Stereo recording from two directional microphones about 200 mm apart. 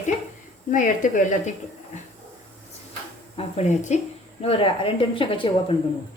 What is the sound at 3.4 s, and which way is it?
Speech, 35° left (ahead or behind).